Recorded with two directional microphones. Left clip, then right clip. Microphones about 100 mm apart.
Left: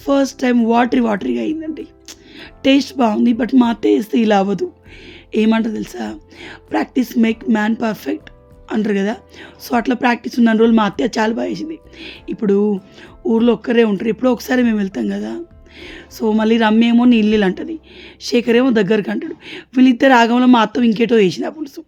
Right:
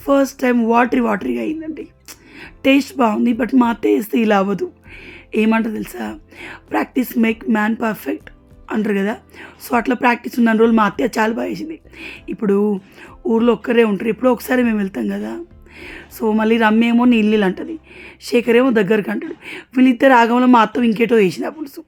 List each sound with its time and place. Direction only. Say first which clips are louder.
0.0 s speech: right 1 dB; 20° left (ahead or behind)